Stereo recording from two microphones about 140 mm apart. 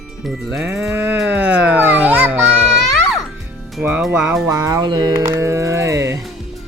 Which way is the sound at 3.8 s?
5° right (ahead or behind).